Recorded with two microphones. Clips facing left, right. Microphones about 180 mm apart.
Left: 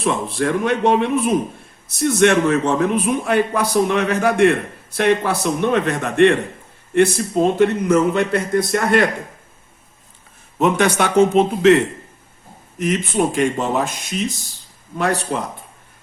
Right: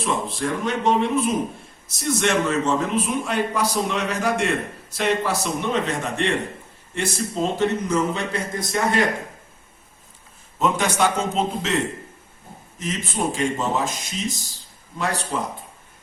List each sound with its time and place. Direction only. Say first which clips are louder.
0.0 s a man's voice: left 5 dB; 65° left (ahead or behind)
10.6 s a man's voice: left 4 dB; 65° left (ahead or behind)
12.8 s a man's voice: left 7 dB; 65° left (ahead or behind)